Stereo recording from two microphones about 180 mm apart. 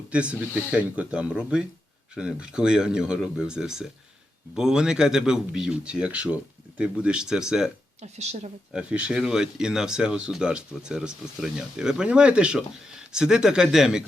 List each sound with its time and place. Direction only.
0.1 s speech: 5° right (ahead or behind)
8.0 s speech: 40° right (ahead or behind)
8.7 s speech: 5° right (ahead or behind)